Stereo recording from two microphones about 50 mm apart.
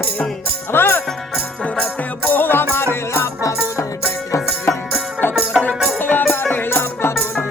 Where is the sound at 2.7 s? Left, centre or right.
Left.